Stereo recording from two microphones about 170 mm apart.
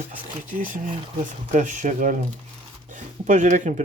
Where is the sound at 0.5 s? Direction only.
50° right (ahead or behind).